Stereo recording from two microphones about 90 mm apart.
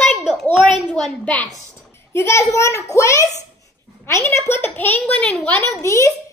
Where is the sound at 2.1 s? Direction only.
30° left (ahead or behind).